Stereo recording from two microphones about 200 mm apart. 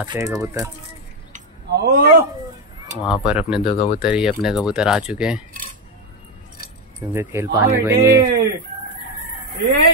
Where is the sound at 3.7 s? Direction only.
30° left (ahead or behind).